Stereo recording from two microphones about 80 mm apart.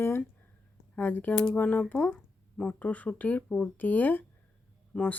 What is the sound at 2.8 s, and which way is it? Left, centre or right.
Speech, centre.